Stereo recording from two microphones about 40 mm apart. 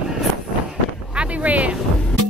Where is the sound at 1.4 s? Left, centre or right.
Right.